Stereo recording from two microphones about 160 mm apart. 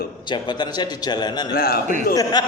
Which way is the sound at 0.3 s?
25° left (ahead or behind).